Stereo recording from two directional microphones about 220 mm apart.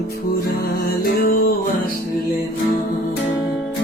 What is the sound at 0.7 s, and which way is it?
Music, 45° left (ahead or behind).